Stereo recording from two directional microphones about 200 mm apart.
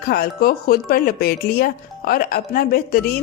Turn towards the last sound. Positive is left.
turn(degrees=50)  # may be behind; listen again after turning